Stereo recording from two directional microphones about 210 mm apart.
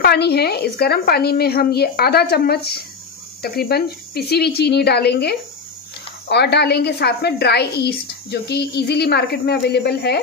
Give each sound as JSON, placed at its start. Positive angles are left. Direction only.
{"t": 0.0, "sound": "a woman's voice", "side_deg": 50}